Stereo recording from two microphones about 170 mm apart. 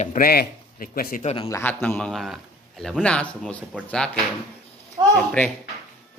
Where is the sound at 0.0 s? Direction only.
50° left (ahead or behind).